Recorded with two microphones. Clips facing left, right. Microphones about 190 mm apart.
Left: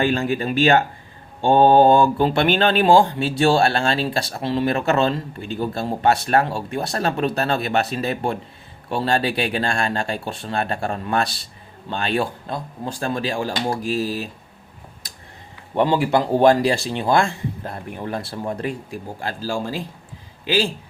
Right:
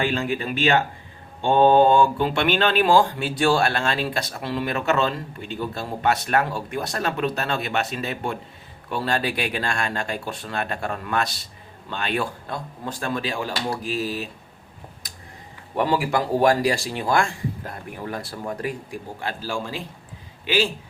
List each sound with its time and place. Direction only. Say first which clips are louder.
0.0 s speech: left 4 dB; 40° left (ahead or behind)
15.7 s speech: left 4 dB; 25° left (ahead or behind)
19.2 s speech: left 4 dB; 35° left (ahead or behind)